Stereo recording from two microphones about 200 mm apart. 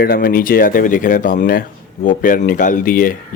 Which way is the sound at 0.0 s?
50° left (ahead or behind).